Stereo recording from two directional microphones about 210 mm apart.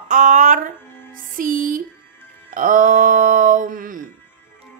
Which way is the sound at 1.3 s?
40° right (ahead or behind).